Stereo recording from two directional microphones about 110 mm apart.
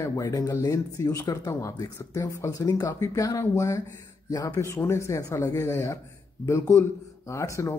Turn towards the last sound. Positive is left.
turn(degrees=25)  # may be behind; listen again after turning